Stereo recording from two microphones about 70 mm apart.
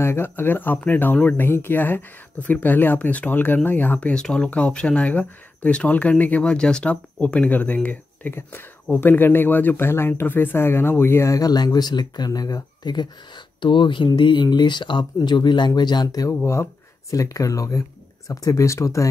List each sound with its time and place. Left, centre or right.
0.0 s speech: left
4.1 s speech: centre; by 11.2 s left
11.2 s speech: left
17.1 s speech: left